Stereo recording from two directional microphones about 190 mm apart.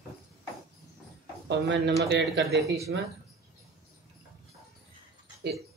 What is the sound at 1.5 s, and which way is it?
Speech, 70° right (ahead or behind).